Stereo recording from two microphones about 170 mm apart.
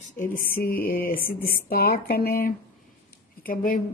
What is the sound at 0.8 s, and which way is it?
Speech, 60° left (ahead or behind).